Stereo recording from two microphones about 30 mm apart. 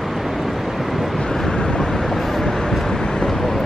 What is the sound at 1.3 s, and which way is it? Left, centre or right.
Vehicle, left.